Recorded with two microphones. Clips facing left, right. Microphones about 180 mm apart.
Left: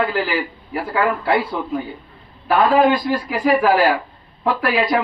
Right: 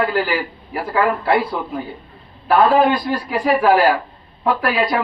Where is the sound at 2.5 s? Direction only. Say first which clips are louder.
Right 1 dB; 30° right (ahead or behind).